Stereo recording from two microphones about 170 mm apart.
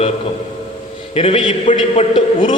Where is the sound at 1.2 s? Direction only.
35° left (ahead or behind).